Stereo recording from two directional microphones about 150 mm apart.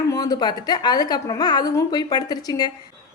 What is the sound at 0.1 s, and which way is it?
A woman's voice, 25° left (ahead or behind).